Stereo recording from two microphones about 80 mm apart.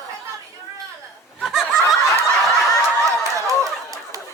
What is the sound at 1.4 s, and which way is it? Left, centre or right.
Snicker, centre.